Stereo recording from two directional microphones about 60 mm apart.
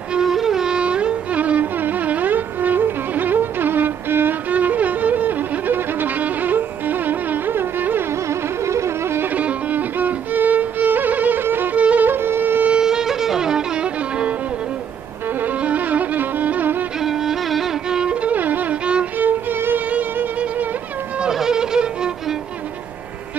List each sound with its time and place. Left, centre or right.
0.1 s music: centre; by 8.0 s right
8.3 s music: right
9.2 s music: right
11.7 s music: right
12.7 s music: centre
15.4 s music: right
17.0 s music: centre
18.3 s music: right
19.1 s violin: right
21.2 s violin: centre